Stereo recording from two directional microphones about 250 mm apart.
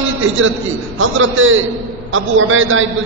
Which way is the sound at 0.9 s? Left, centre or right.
Right.